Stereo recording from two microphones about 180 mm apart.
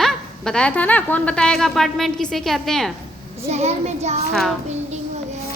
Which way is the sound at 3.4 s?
35° right (ahead or behind).